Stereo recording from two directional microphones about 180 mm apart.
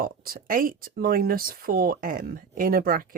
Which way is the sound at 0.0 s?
55° right (ahead or behind).